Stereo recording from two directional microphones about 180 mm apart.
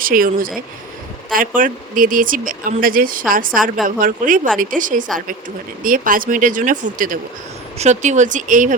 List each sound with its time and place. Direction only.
0.0 s speech: 50° right (ahead or behind)